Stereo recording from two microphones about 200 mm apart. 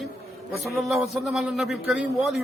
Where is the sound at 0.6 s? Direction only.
Centre (ahead or behind).